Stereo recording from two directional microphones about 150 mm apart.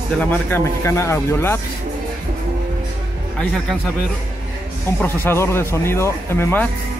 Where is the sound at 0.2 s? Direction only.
15° left (ahead or behind).